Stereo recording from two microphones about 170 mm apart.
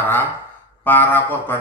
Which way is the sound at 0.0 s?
10° left (ahead or behind).